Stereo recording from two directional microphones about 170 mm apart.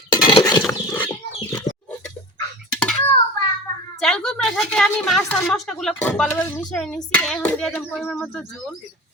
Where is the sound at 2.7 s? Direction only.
5° left (ahead or behind).